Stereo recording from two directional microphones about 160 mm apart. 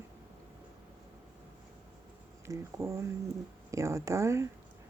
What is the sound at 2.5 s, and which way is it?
Speech, 20° right (ahead or behind).